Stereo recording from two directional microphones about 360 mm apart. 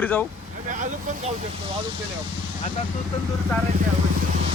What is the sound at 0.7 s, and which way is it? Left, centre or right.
Speech, right.